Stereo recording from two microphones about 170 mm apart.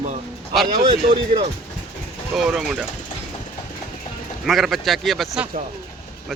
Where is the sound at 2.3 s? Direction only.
Centre (ahead or behind).